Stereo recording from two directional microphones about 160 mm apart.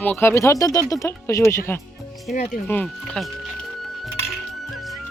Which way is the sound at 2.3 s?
45° left (ahead or behind).